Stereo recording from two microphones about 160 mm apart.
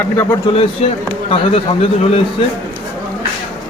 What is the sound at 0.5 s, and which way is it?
A man's voice, 40° left (ahead or behind).